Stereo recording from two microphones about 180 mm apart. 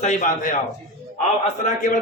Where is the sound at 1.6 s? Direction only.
45° left (ahead or behind).